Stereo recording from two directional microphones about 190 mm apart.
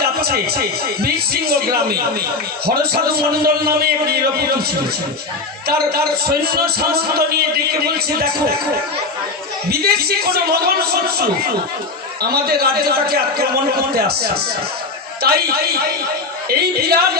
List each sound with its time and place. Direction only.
0.0 s a man's voice: 55° right (ahead or behind)
5.6 s a man's voice: 55° right (ahead or behind)
9.6 s a man's voice: 55° right (ahead or behind)